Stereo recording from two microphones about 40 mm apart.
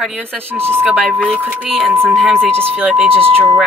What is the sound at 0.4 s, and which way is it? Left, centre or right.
Speech, right.